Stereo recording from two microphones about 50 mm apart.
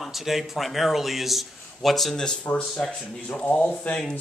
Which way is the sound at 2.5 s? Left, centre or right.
Left.